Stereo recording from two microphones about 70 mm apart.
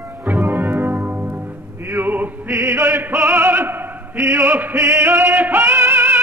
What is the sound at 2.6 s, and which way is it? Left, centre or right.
Opera, right.